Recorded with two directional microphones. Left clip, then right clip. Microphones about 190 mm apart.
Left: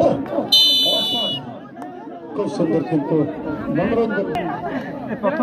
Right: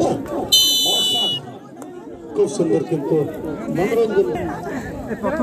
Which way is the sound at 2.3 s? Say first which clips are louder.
Right 2 dB; 45° right (ahead or behind).